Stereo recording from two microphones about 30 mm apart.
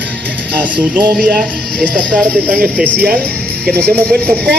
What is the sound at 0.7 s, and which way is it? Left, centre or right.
Speech, right.